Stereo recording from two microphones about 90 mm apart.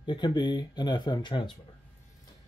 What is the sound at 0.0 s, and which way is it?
Speech, 55° left (ahead or behind).